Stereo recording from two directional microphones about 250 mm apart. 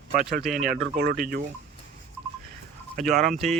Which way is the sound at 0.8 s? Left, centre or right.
Right.